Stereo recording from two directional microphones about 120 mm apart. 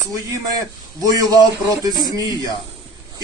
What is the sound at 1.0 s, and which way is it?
A man's voice, 30° right (ahead or behind).